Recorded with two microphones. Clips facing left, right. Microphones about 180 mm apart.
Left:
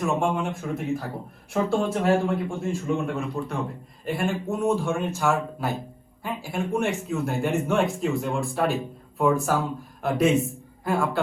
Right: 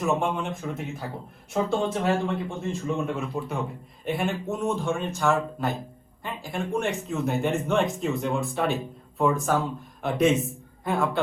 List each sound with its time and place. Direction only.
0.0 s a man's voice: centre (ahead or behind)